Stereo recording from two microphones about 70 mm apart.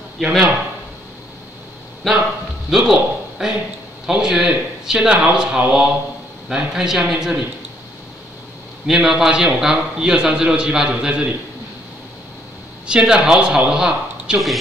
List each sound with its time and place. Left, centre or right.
0.2 s a man's voice: centre
2.0 s a man's voice: centre
8.8 s a man's voice: centre
12.8 s a man's voice: centre